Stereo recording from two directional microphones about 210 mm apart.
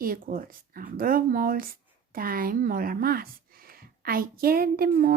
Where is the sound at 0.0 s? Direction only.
40° right (ahead or behind).